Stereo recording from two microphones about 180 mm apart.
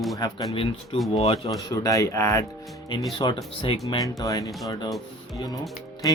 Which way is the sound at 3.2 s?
30° left (ahead or behind).